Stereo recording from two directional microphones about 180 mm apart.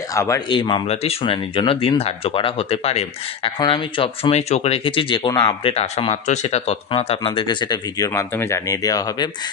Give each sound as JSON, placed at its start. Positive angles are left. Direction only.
{"t": 0.1, "sound": "speech", "side_deg": 15}